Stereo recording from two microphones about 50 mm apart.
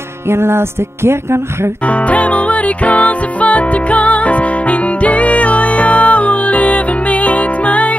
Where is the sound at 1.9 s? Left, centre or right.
Left.